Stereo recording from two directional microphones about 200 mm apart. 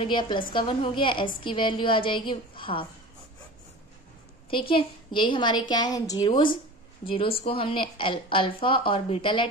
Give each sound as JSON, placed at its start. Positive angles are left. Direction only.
{"t": 0.0, "sound": "a woman's voice", "side_deg": 25}
{"t": 4.5, "sound": "a woman's voice", "side_deg": 25}